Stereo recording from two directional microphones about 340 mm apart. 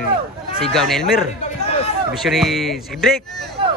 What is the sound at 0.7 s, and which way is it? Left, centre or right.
Speech, centre.